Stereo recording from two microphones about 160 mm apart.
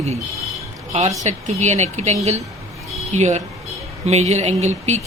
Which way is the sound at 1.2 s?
45° right (ahead or behind).